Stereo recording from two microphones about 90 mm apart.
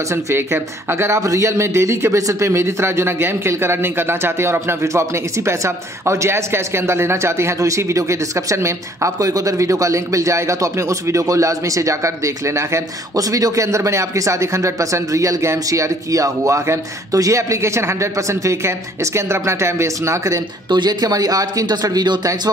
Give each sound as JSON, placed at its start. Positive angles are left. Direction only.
{"t": 0.1, "sound": "speech", "side_deg": -30}
{"t": 20.7, "sound": "speech", "side_deg": -50}